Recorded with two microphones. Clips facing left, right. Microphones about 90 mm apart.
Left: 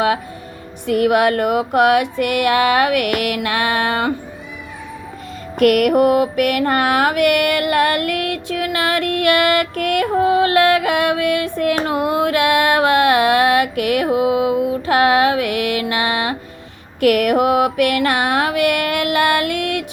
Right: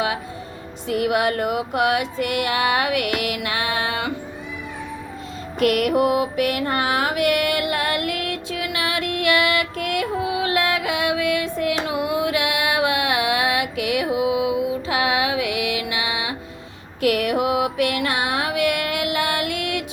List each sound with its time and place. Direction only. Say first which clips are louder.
0.9 s mantra: left 6 dB; 50° left (ahead or behind)
5.5 s mantra: left 6 dB; 55° left (ahead or behind)